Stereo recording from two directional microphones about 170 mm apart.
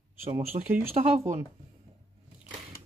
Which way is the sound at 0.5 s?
30° right (ahead or behind).